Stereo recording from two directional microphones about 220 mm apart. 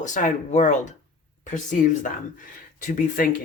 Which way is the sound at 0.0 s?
35° left (ahead or behind).